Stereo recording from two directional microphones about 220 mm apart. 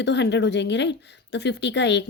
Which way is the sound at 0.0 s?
50° left (ahead or behind).